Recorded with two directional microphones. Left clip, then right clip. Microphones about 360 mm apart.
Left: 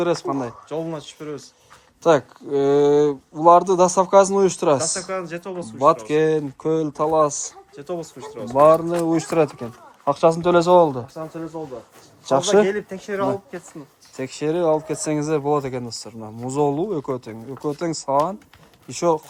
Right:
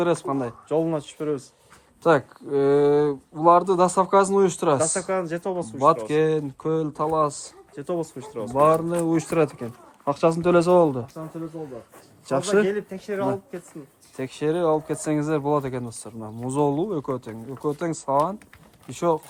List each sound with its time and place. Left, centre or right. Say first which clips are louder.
0.0 s speech: left 1 dB; centre
0.7 s speech: right 4 dB; centre
2.0 s speech: left 3 dB; centre
4.8 s speech: right 2 dB; right
6.1 s speech: left 3 dB; centre
7.8 s speech: right 2 dB; right
8.5 s speech: left 5 dB; centre
12.2 s a man's voice: left 5 dB; centre
12.6 s speech: left 2 dB; left
14.2 s speech: left 2 dB; centre